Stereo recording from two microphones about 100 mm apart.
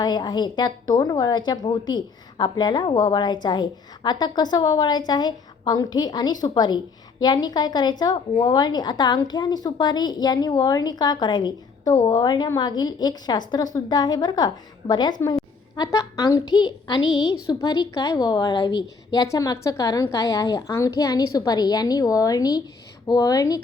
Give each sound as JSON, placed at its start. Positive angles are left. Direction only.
{"t": 0.0, "sound": "a woman's voice", "side_deg": 45}